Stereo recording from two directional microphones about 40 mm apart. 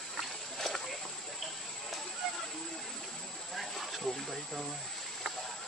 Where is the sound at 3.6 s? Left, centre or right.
Centre.